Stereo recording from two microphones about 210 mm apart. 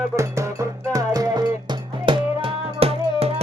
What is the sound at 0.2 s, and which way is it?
Music, 15° right (ahead or behind).